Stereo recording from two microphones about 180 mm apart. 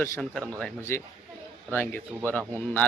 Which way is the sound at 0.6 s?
15° left (ahead or behind).